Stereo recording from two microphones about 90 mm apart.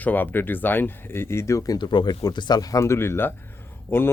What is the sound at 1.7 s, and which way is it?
Speech, 55° left (ahead or behind).